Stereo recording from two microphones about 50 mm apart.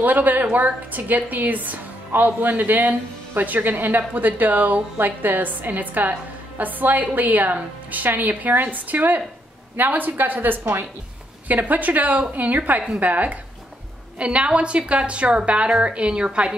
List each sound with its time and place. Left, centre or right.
0.0 s a woman's voice: right
11.4 s a woman's voice: right